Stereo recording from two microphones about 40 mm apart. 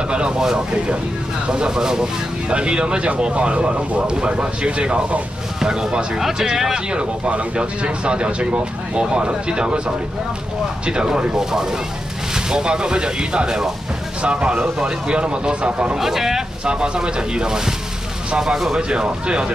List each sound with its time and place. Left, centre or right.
1.5 s speech: centre
6.9 s speech: right
16.0 s speech: centre
16.6 s speech: right